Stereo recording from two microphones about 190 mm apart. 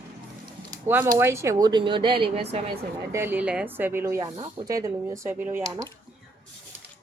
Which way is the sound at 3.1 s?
10° right (ahead or behind).